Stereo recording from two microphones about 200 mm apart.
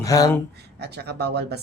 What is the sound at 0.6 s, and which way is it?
Speech, 55° right (ahead or behind).